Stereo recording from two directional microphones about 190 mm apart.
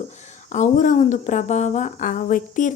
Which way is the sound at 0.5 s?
40° left (ahead or behind).